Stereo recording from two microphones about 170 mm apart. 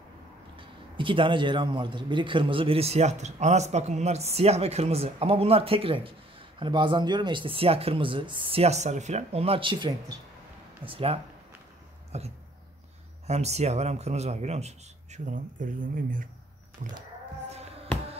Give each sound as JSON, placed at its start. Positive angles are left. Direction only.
{"t": 0.6, "sound": "speech", "side_deg": -30}
{"t": 16.8, "sound": "cat", "side_deg": -45}